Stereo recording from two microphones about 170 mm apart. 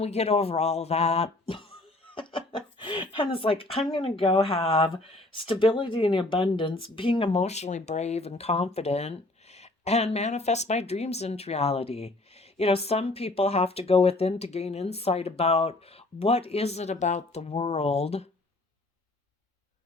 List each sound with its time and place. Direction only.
0.0 s speech: 40° left (ahead or behind)